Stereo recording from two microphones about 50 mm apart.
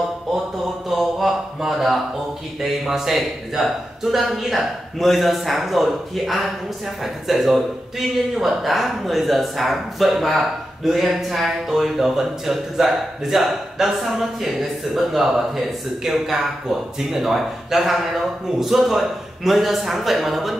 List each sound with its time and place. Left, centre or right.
0.8 s mantra: centre
2.9 s speech: centre